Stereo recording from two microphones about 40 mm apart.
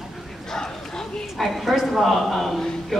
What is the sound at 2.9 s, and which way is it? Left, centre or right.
Music, centre.